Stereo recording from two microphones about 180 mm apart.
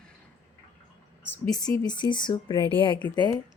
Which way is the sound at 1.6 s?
25° left (ahead or behind).